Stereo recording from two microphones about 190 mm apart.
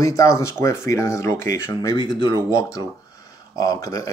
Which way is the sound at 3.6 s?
20° left (ahead or behind).